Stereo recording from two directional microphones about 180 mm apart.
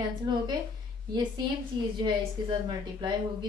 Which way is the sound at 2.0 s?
25° right (ahead or behind).